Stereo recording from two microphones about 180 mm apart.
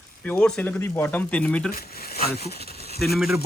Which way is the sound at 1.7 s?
60° left (ahead or behind).